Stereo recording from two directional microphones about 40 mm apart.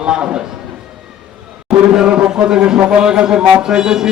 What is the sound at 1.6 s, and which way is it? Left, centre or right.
Speech, centre.